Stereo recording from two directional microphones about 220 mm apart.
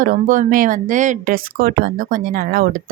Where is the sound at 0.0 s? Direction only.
35° right (ahead or behind).